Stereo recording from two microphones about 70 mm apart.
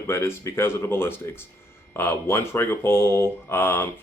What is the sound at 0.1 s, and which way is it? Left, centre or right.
Speech, left.